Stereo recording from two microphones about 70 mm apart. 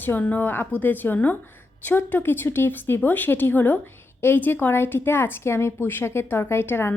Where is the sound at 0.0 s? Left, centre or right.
Left.